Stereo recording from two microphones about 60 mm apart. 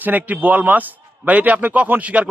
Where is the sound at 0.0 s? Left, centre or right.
Right.